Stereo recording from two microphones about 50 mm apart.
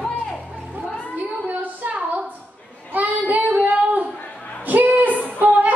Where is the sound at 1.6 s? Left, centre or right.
Right.